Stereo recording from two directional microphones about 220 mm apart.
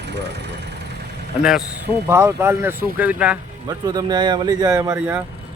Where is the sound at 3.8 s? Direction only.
20° right (ahead or behind).